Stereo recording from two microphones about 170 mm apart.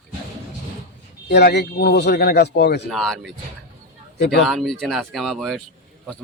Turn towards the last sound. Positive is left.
turn(degrees=0)  # may be behind; listen again after turning